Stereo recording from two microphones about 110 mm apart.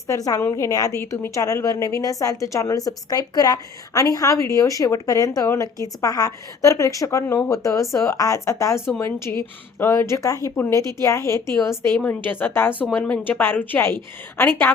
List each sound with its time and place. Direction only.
0.1 s a woman's voice: 30° left (ahead or behind)